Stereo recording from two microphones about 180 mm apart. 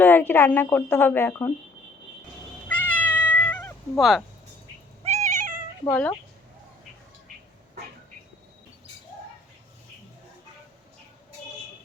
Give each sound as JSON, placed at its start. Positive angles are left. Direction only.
{"t": 0.0, "sound": "speech", "side_deg": 10}
{"t": 2.6, "sound": "cat", "side_deg": 10}
{"t": 3.9, "sound": "speech", "side_deg": 0}
{"t": 5.0, "sound": "cat", "side_deg": -40}
{"t": 5.8, "sound": "speech", "side_deg": 15}